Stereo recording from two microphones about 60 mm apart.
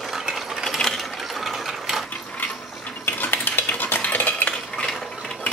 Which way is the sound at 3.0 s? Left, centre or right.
Left.